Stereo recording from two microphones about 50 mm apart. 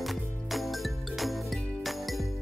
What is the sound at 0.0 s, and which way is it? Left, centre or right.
Music, centre.